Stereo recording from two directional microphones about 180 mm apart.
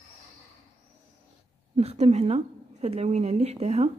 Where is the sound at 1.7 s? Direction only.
35° right (ahead or behind).